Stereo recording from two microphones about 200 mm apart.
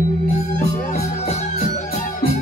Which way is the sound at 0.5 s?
35° left (ahead or behind).